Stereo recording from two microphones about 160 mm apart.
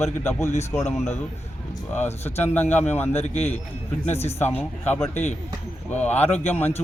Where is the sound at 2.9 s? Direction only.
10° left (ahead or behind).